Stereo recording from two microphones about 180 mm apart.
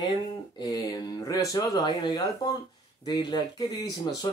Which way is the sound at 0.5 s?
20° left (ahead or behind).